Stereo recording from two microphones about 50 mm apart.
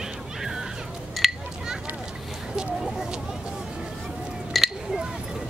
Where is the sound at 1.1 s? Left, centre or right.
Centre.